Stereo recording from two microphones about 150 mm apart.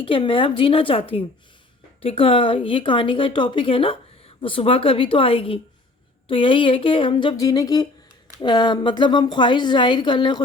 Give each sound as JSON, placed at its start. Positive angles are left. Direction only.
{"t": 0.0, "sound": "a woman's voice", "side_deg": 35}